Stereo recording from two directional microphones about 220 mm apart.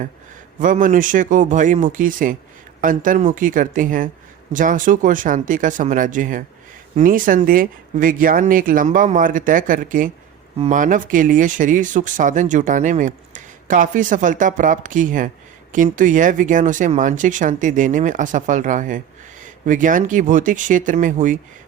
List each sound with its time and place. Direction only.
0.6 s speech: 35° right (ahead or behind)